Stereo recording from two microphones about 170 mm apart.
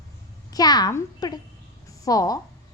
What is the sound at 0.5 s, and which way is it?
A woman's voice, 25° left (ahead or behind).